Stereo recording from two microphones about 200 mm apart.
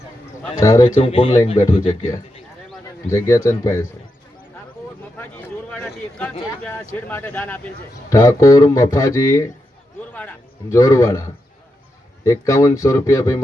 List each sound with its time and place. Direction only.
1.0 s speech: 25° left (ahead or behind)
3.1 s speech: 15° left (ahead or behind)
5.1 s a sound: 10° left (ahead or behind)
6.6 s speech: 5° left (ahead or behind)
10.1 s a sound: 10° left (ahead or behind)
12.2 s speech: 15° left (ahead or behind)